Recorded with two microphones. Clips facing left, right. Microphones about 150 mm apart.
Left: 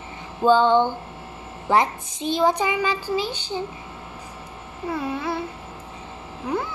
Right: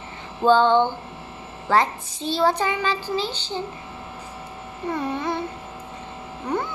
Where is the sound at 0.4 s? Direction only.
10° left (ahead or behind).